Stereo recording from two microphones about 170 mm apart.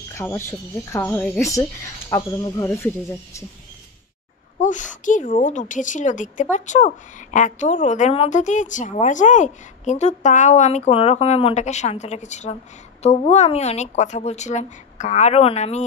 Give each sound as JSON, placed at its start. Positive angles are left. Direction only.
{"t": 0.1, "sound": "speech", "side_deg": 15}
{"t": 4.6, "sound": "a woman's voice", "side_deg": 50}